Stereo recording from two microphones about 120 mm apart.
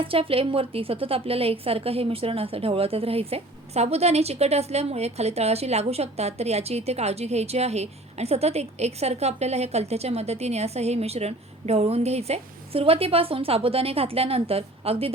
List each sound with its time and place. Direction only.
0.0 s a woman's voice: 50° right (ahead or behind)